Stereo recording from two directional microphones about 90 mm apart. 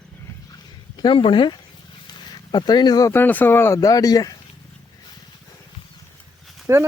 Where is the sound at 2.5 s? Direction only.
55° left (ahead or behind).